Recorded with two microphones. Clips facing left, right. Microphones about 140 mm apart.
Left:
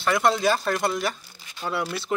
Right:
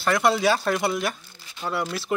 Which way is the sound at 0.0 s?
5° right (ahead or behind).